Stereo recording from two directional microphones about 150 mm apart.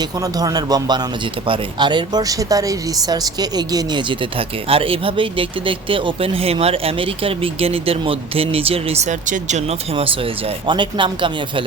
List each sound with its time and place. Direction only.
0.2 s a man's voice: 25° right (ahead or behind)